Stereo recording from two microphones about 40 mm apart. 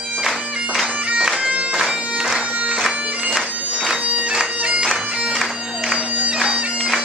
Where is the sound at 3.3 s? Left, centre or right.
Centre.